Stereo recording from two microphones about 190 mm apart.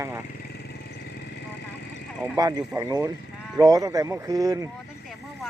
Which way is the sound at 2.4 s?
20° right (ahead or behind).